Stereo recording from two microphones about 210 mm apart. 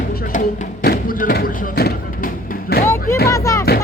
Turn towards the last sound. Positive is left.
turn(degrees=15)  # may be behind; listen again after turning